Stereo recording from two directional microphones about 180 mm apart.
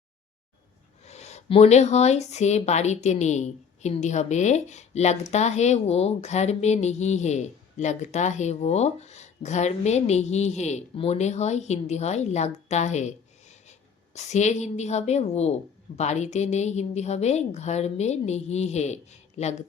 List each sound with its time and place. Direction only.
1.0 s a woman's voice: 40° left (ahead or behind)